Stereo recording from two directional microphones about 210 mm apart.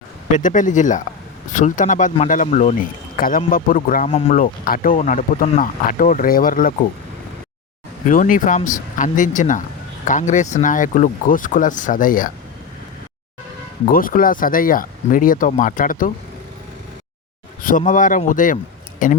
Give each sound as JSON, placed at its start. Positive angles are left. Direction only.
{"t": 0.3, "sound": "speech", "side_deg": 40}
{"t": 8.0, "sound": "speech", "side_deg": 40}
{"t": 13.8, "sound": "speech", "side_deg": 40}
{"t": 17.6, "sound": "a man's voice", "side_deg": 40}